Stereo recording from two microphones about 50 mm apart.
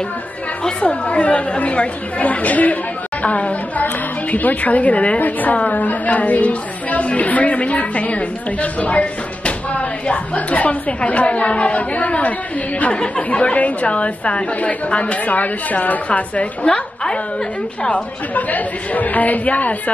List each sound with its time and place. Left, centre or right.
0.7 s a woman's voice: left
17.8 s a woman's voice: left